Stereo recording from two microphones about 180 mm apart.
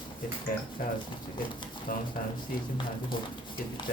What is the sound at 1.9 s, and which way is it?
Speech, 50° left (ahead or behind).